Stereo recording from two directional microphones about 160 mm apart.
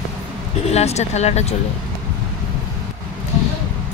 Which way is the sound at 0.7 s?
40° left (ahead or behind).